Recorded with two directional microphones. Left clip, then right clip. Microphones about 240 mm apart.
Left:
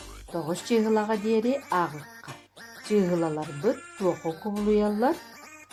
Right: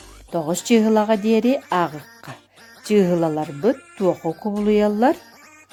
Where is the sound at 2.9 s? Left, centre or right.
Right.